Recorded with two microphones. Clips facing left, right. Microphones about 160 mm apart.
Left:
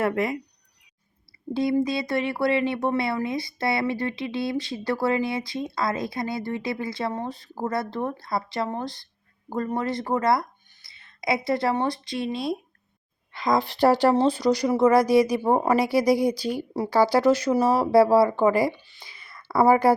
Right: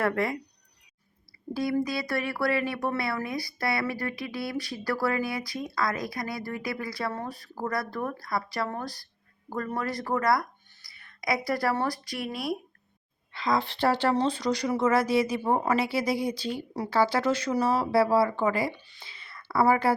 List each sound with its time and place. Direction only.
0.0 s speech: 20° left (ahead or behind)
1.5 s speech: 25° left (ahead or behind)
13.3 s speech: 45° left (ahead or behind)
14.3 s speech: 10° left (ahead or behind)
14.7 s speech: 35° left (ahead or behind)
16.3 s speech: 10° left (ahead or behind)
17.0 s speech: 40° left (ahead or behind)
17.2 s speech: 10° left (ahead or behind)
17.5 s speech: 40° left (ahead or behind)
19.3 s a sound: 40° left (ahead or behind)